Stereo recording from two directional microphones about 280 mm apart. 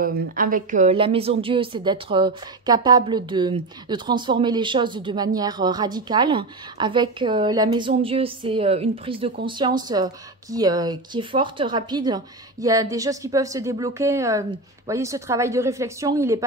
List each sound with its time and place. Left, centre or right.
0.0 s a woman's voice: right; by 16.4 s centre